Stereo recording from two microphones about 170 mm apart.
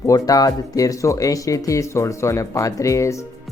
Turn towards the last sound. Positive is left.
turn(degrees=15)  # may be behind; listen again after turning